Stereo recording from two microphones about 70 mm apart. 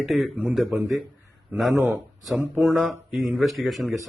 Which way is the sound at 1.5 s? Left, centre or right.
Right.